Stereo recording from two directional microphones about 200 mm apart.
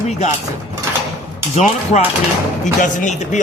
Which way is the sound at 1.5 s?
30° left (ahead or behind).